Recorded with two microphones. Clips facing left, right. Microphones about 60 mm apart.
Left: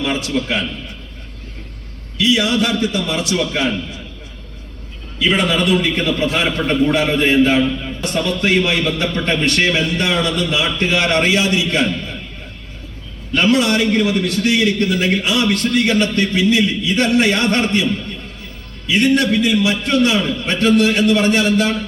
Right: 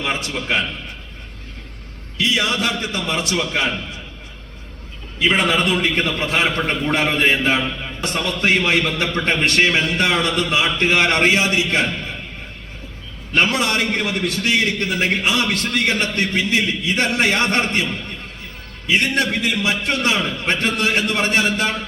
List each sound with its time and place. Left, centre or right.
0.0 s a man's voice: right
2.1 s a man's voice: right
5.2 s a man's voice: right
13.3 s a man's voice: right
18.9 s a man's voice: right